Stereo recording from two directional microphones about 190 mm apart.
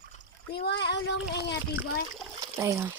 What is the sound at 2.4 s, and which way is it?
Speech, 15° right (ahead or behind).